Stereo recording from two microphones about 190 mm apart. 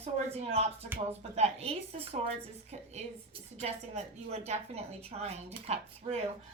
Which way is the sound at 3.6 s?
35° right (ahead or behind).